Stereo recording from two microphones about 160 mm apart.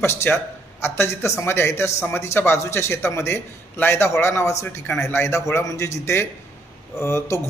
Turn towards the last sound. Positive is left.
turn(degrees=15)  # may be behind; listen again after turning